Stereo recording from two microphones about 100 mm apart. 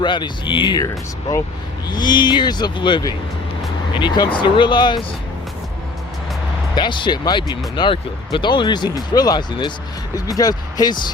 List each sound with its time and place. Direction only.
0.0 s speech: 50° left (ahead or behind)
1.3 s speech: 35° left (ahead or behind)
1.9 s speech: 45° left (ahead or behind)
6.7 s speech: 50° left (ahead or behind)